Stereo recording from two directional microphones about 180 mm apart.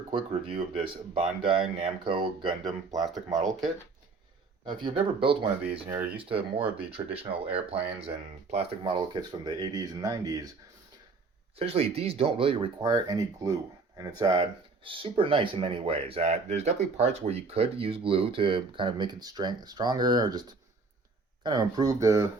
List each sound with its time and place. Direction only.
0.1 s speech: 30° right (ahead or behind)
4.6 s speech: 25° right (ahead or behind)
6.3 s speech: 5° right (ahead or behind)
6.9 s speech: 30° right (ahead or behind)
11.6 s speech: 35° right (ahead or behind); by 22.3 s 15° right (ahead or behind)